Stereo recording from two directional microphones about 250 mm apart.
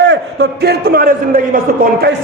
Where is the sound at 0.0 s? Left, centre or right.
Right.